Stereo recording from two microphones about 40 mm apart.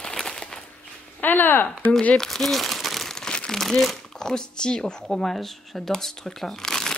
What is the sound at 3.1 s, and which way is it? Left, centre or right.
Crumpling, centre.